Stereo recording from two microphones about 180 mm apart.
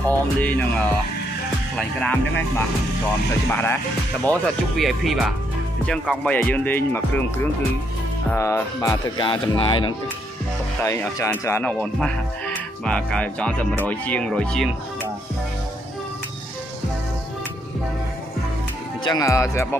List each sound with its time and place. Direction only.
0.1 s speech: 10° left (ahead or behind)
8.3 s speech: 10° left (ahead or behind)
10.8 s speech: 15° left (ahead or behind)
19.0 s speech: 20° left (ahead or behind)